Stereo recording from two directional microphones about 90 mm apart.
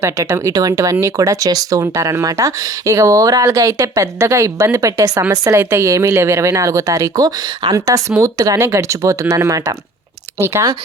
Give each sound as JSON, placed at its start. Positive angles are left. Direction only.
{"t": 0.0, "sound": "speech", "side_deg": -35}